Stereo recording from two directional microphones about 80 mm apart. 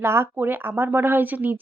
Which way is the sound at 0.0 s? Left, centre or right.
Right.